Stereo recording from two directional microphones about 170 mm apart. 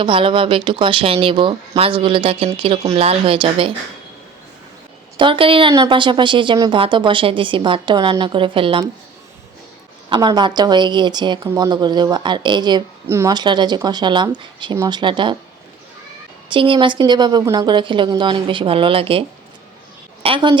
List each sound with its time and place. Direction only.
0.0 s speech: 30° right (ahead or behind)
5.1 s a woman's voice: 30° right (ahead or behind)
10.1 s a woman's voice: 25° right (ahead or behind)
16.5 s a woman's voice: 30° right (ahead or behind)
20.2 s a woman's voice: 30° right (ahead or behind)